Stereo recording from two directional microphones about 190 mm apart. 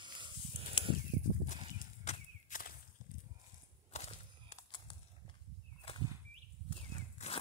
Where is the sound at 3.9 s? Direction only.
35° left (ahead or behind).